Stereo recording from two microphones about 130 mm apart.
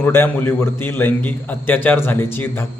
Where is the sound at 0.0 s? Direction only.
15° left (ahead or behind).